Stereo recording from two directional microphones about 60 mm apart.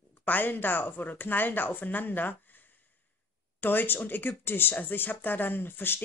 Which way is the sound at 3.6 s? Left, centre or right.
Left.